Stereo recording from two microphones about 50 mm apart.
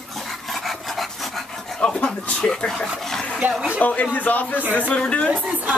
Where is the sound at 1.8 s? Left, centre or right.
Centre.